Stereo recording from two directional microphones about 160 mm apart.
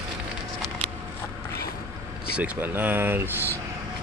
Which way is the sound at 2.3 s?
5° right (ahead or behind).